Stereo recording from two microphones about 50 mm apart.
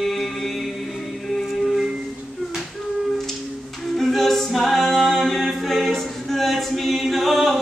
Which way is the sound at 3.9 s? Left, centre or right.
Centre.